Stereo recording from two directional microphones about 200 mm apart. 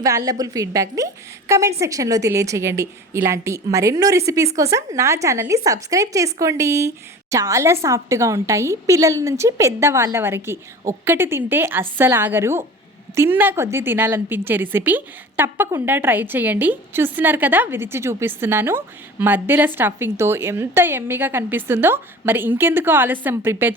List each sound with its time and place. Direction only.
0.3 s a woman's voice: 15° right (ahead or behind)